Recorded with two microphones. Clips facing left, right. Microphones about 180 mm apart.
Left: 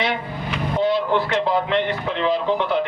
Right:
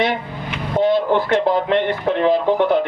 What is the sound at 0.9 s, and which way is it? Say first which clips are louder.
A man's voice: right 5 dB; 50° right (ahead or behind).